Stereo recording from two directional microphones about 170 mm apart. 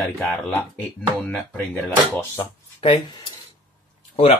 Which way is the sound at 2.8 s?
30° left (ahead or behind).